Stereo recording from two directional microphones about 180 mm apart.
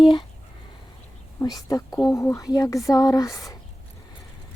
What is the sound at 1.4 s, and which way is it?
Speech, 20° left (ahead or behind).